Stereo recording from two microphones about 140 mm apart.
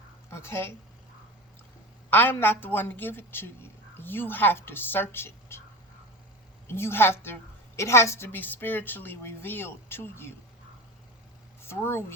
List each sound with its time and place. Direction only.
0.3 s a woman's voice: 20° left (ahead or behind)
2.0 s a woman's voice: 15° left (ahead or behind)
6.7 s a woman's voice: 15° left (ahead or behind)
11.6 s speech: 15° left (ahead or behind)